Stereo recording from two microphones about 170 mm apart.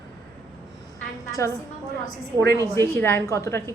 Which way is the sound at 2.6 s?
15° left (ahead or behind).